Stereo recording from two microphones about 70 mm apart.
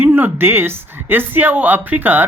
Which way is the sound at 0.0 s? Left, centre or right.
Right.